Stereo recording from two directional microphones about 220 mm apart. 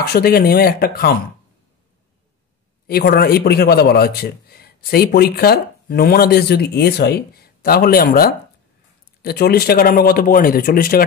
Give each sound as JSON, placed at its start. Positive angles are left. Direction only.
{"t": 0.1, "sound": "a man's voice", "side_deg": 45}
{"t": 2.9, "sound": "a man's voice", "side_deg": 45}